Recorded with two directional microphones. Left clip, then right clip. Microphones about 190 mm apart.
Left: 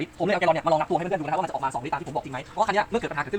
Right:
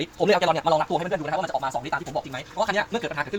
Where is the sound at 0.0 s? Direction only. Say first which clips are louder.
Right 2 dB; 20° right (ahead or behind).